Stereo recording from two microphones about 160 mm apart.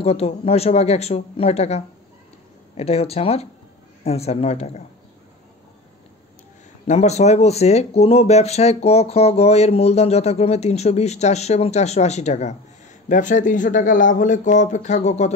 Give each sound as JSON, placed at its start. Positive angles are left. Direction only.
{"t": 0.0, "sound": "speech", "side_deg": 40}
{"t": 2.8, "sound": "speech", "side_deg": 40}
{"t": 6.9, "sound": "speech", "side_deg": 45}